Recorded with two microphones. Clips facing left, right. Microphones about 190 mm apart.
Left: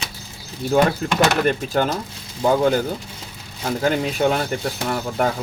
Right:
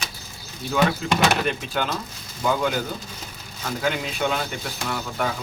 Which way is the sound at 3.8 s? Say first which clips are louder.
Left 6 dB; 40° left (ahead or behind).